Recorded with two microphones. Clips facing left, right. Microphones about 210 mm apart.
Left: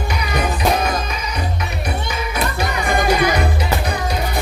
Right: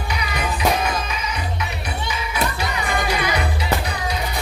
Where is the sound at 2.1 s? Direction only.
45° left (ahead or behind).